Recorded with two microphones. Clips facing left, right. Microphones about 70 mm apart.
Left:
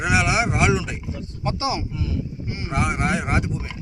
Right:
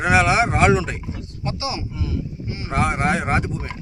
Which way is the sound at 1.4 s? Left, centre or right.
Left.